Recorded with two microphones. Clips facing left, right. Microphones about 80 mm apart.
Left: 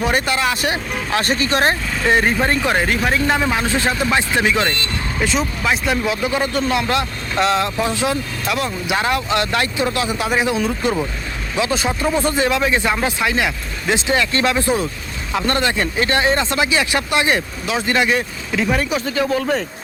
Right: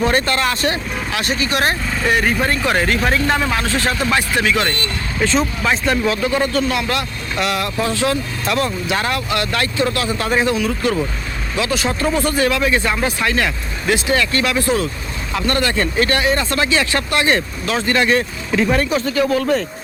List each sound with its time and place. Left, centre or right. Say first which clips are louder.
0.0 s speech: right 1 dB; centre
1.1 s speech: left 2 dB; left
5.2 s speech: right 3 dB; centre
6.2 s speech: right 2 dB; centre
8.4 s speech: right 3 dB; centre
8.9 s speech: left 1 dB; centre
10.5 s speech: right 1 dB; left
19.4 s speech: right 2 dB; centre